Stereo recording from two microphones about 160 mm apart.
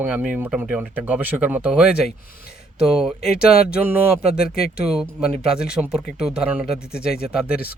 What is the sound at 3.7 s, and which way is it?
Speech, 15° right (ahead or behind).